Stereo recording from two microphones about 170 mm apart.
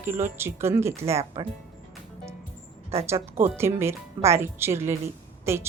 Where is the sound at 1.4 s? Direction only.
25° right (ahead or behind).